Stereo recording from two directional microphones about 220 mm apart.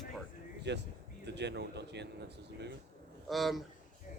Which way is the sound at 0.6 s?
50° right (ahead or behind).